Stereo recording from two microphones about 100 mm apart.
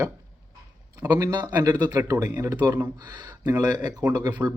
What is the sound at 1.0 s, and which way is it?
Speech, 40° right (ahead or behind).